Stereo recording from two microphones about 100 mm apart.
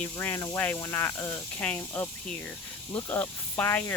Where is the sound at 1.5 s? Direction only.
15° left (ahead or behind).